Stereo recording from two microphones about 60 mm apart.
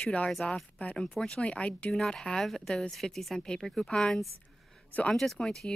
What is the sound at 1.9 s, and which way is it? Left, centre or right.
Speech, centre.